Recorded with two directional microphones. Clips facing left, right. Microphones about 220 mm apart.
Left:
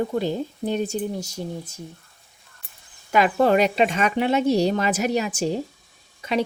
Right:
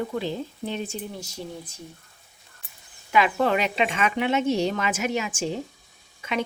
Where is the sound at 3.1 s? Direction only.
40° left (ahead or behind).